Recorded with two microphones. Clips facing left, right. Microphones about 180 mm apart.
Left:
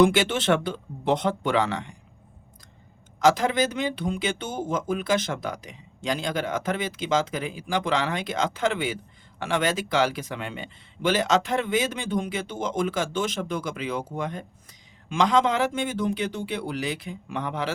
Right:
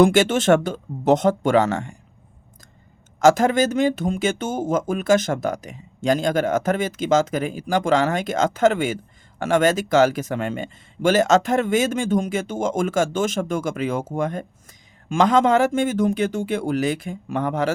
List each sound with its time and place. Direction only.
0.0 s speech: 45° right (ahead or behind)
3.2 s speech: 45° right (ahead or behind)